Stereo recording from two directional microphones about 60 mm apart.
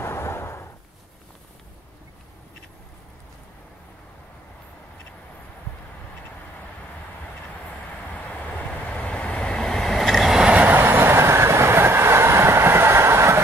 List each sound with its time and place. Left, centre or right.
0.0 s a sound: left
8.1 s vehicle: left; by 10.4 s centre
10.4 s train: centre
10.7 s train: right